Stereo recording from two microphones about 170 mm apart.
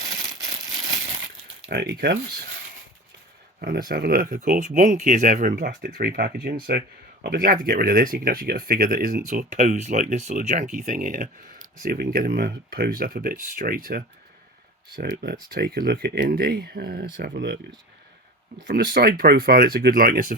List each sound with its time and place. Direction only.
0.4 s a sound: 20° right (ahead or behind)
1.7 s speech: 75° right (ahead or behind)
3.6 s speech: 60° right (ahead or behind)
5.5 s speech: 70° right (ahead or behind)
9.5 s speech: 45° right (ahead or behind)
11.8 s speech: 60° right (ahead or behind)
18.6 s speech: 75° right (ahead or behind); by 20.2 s 55° right (ahead or behind)